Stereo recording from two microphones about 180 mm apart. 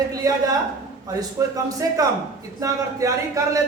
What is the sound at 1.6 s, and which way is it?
A man's voice, 20° right (ahead or behind).